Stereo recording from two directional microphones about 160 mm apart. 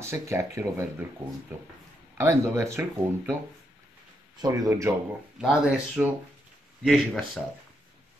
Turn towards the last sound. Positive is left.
turn(degrees=0)  # may be behind; listen again after turning